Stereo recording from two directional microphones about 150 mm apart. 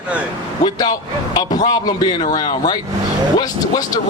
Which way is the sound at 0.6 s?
25° left (ahead or behind).